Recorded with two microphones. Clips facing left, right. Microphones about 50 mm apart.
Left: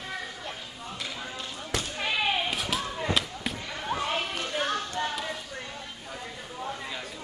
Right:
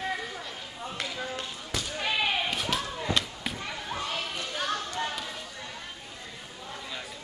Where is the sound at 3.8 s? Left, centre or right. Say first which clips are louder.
Left 6 dB; left.